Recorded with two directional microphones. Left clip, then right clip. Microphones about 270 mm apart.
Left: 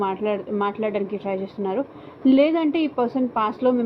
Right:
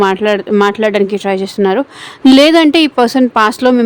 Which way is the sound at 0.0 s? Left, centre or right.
Right.